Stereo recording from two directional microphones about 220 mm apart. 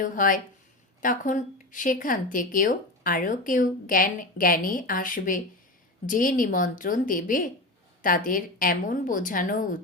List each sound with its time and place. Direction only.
0.0 s speech: 35° left (ahead or behind)